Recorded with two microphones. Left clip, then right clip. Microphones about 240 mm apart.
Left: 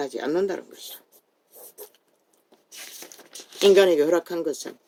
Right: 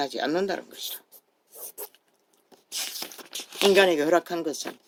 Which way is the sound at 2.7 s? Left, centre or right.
Right.